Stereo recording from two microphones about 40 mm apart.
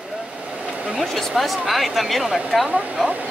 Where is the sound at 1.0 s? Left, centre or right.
Centre.